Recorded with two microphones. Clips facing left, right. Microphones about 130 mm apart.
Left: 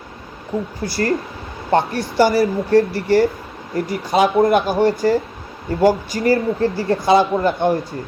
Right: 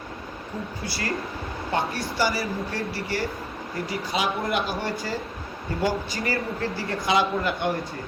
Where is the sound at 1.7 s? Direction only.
55° left (ahead or behind).